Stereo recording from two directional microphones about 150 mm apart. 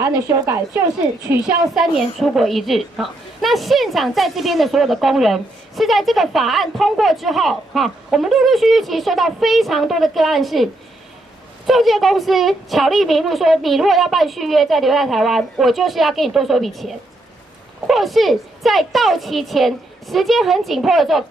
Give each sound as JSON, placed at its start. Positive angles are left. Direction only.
{"t": 0.0, "sound": "a woman's voice", "side_deg": -20}
{"t": 1.3, "sound": "a woman's voice", "side_deg": 0}